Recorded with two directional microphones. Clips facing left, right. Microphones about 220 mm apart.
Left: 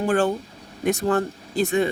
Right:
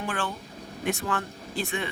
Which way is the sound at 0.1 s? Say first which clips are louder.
Left 12 dB; 45° left (ahead or behind).